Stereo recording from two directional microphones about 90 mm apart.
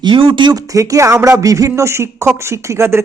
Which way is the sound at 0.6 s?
40° right (ahead or behind).